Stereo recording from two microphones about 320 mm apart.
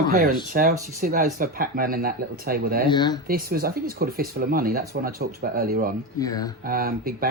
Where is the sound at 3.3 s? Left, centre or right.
Right.